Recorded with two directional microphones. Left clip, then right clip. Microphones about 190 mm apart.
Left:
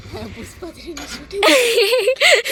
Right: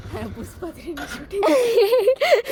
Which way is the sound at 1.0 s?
10° right (ahead or behind).